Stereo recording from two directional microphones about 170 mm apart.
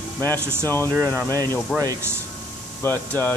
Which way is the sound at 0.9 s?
15° right (ahead or behind).